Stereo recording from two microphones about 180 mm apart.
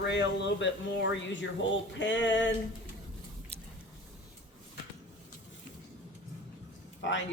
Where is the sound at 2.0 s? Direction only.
80° left.